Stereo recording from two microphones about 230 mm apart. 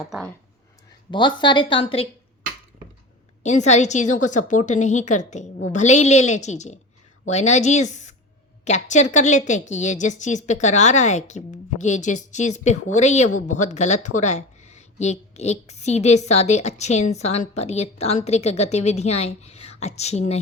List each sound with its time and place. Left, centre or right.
1.1 s a woman's voice: centre
3.4 s a woman's voice: left